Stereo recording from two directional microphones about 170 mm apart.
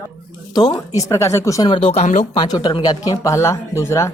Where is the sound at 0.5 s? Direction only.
25° left (ahead or behind); by 2.2 s 45° left (ahead or behind).